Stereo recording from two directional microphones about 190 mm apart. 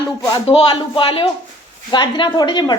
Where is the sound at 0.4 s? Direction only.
30° left (ahead or behind).